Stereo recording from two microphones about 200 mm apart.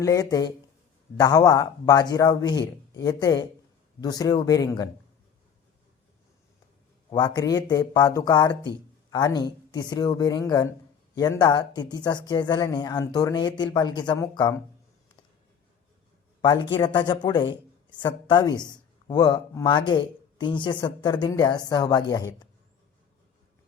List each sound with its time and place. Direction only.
0.0 s speech: 15° left (ahead or behind)
7.1 s speech: 20° left (ahead or behind)
16.7 s speech: 25° left (ahead or behind)